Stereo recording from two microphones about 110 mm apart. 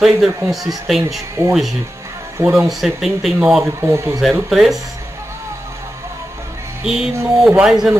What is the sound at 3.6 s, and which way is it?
Speech, 25° right (ahead or behind).